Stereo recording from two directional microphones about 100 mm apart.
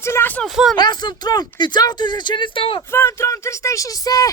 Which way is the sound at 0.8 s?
45° left (ahead or behind).